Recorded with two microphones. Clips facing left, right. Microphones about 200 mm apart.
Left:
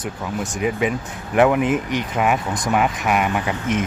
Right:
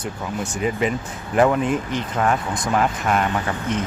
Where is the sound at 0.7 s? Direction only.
5° left (ahead or behind).